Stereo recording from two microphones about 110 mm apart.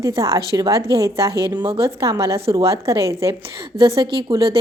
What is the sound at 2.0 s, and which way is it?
A woman's voice, 30° right (ahead or behind).